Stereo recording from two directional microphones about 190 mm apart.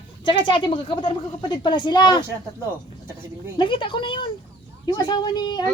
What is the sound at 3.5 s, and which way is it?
A woman's voice, 25° left (ahead or behind).